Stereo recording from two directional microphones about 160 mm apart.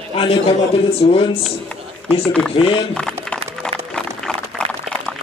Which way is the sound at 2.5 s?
35° left (ahead or behind).